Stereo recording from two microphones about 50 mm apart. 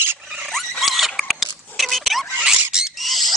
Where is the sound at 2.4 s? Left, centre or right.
Centre.